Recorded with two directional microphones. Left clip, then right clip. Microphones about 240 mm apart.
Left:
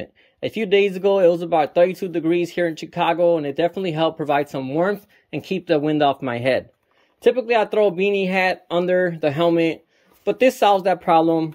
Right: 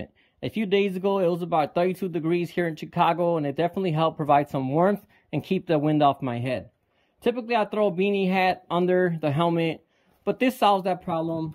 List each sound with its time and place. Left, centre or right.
0.0 s speech: centre
11.1 s speech: left